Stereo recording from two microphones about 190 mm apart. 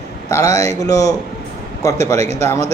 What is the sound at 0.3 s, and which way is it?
A man's voice, 15° left (ahead or behind).